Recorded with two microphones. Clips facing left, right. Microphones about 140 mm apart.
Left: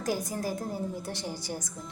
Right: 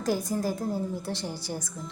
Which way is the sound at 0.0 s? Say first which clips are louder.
Right 3 dB; 15° left (ahead or behind).